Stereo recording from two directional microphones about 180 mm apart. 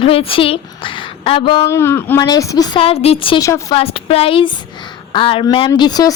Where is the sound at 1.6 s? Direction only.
15° left (ahead or behind).